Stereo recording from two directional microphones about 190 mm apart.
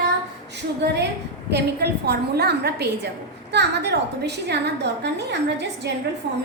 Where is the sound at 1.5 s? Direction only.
60° right (ahead or behind).